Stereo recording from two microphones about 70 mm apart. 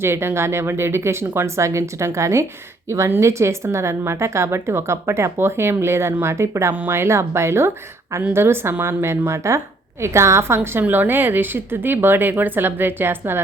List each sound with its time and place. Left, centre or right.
0.0 s speech: right